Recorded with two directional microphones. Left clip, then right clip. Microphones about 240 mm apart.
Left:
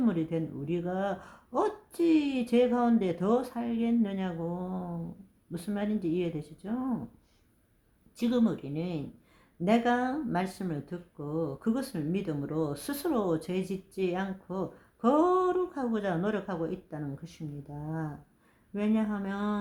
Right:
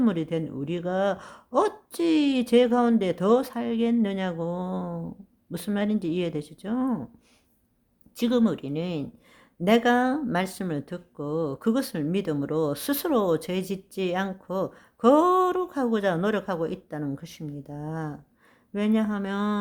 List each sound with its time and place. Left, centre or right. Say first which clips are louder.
0.0 s speech: right 4 dB; right
8.1 s speech: right 5 dB; right